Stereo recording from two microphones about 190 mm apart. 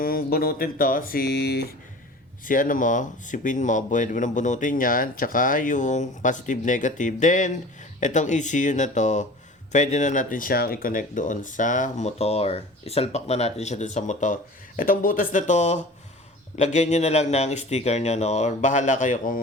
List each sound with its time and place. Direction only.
0.0 s speech: 50° left (ahead or behind)
2.4 s speech: 45° left (ahead or behind)